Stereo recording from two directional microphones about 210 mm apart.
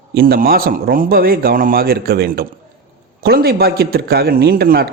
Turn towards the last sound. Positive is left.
turn(degrees=-45)  # may be behind; listen again after turning